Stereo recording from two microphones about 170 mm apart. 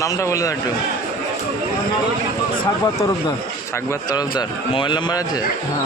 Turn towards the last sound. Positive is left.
turn(degrees=25)  # may be behind; listen again after turning